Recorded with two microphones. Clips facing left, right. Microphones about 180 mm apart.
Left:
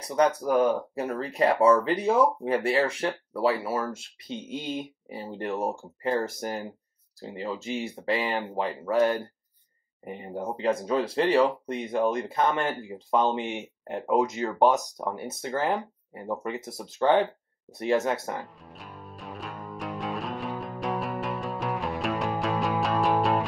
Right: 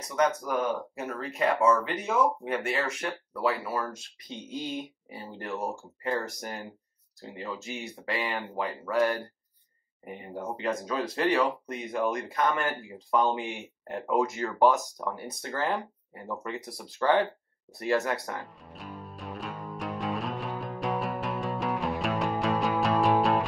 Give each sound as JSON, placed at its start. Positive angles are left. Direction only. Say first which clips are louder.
{"t": 0.1, "sound": "speech", "louder": "left 4 dB", "side_deg": 35}
{"t": 18.4, "sound": "music", "louder": "even", "side_deg": 0}